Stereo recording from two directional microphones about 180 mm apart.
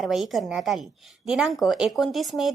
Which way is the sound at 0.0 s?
Centre (ahead or behind).